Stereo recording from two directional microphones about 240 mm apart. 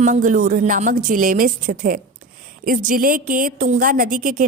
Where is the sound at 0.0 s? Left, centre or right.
Right.